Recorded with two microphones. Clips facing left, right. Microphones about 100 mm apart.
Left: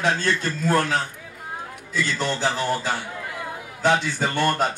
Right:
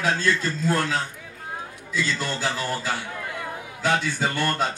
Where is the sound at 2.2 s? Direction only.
20° left (ahead or behind).